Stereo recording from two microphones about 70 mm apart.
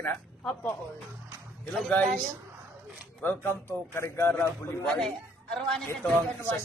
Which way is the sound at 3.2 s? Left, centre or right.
Left.